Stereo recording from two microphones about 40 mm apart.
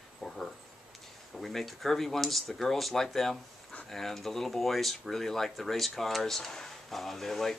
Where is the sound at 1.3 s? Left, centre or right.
Centre.